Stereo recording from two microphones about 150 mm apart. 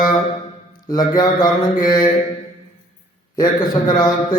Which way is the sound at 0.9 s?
25° left (ahead or behind).